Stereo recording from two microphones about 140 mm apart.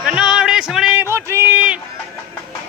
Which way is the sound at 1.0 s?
20° right (ahead or behind).